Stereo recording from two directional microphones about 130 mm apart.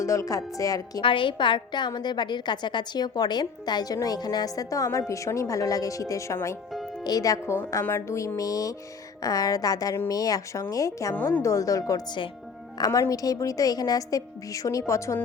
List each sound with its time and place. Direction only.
0.0 s a woman's voice: 25° left (ahead or behind)
1.0 s a woman's voice: 40° left (ahead or behind); by 11.1 s 25° left (ahead or behind)
11.1 s a woman's voice: 15° left (ahead or behind)